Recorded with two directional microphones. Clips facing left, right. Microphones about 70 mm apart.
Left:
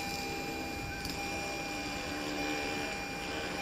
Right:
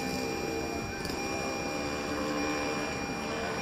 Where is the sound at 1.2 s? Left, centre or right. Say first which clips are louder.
Right 5 dB; centre.